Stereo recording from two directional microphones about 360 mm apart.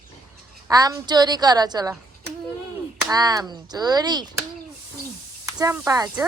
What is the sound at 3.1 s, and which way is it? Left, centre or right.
A woman's voice, centre.